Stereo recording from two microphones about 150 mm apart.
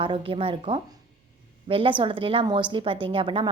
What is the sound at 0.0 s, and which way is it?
A woman's voice, 35° right (ahead or behind).